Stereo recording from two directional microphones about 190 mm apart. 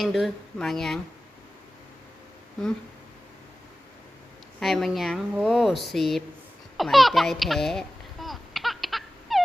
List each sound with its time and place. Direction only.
0.0 s speech: centre (ahead or behind)
4.6 s speech: centre (ahead or behind)
6.7 s babbling: centre (ahead or behind)